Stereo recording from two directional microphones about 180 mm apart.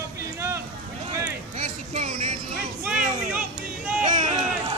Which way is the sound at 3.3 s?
5° right (ahead or behind).